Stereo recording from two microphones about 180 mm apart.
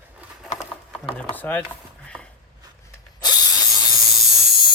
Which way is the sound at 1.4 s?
10° left (ahead or behind).